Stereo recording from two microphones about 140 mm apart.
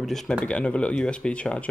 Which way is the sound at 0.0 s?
Centre (ahead or behind).